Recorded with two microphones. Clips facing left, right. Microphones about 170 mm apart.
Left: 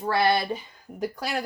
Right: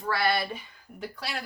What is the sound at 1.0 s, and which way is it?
Speech, 45° left (ahead or behind).